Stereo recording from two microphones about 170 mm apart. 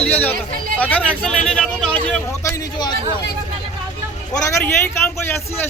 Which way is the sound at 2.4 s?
20° left (ahead or behind).